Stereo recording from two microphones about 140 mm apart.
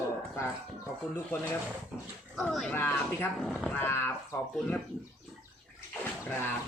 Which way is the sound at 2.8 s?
15° left (ahead or behind).